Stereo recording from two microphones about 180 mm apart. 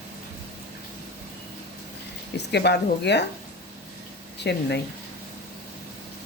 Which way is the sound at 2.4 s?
70° left (ahead or behind).